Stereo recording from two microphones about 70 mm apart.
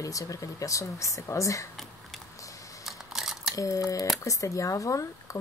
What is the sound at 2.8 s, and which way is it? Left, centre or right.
Camera, centre.